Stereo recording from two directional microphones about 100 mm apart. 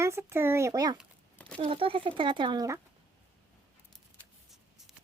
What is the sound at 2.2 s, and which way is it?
Speech, 55° right (ahead or behind).